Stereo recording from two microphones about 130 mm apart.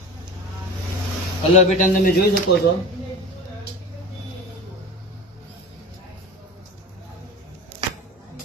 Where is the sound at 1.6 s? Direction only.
75° left (ahead or behind); by 2.4 s 90° left.